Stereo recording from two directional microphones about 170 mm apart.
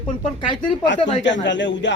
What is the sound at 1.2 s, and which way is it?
Speech, 90° left.